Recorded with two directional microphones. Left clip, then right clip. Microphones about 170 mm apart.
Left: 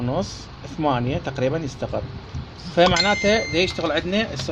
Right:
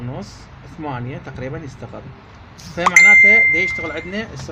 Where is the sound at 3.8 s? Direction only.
30° left (ahead or behind).